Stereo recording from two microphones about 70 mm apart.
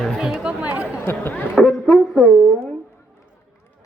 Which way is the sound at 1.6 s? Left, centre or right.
Centre.